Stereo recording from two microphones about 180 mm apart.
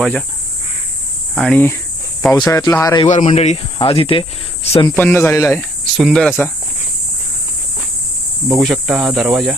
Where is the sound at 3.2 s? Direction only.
35° left (ahead or behind).